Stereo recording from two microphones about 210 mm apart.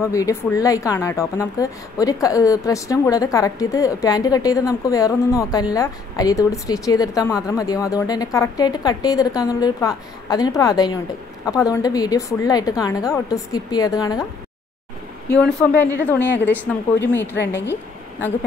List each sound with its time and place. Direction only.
0.1 s a woman's voice: 15° left (ahead or behind)
15.3 s a woman's voice: 5° left (ahead or behind)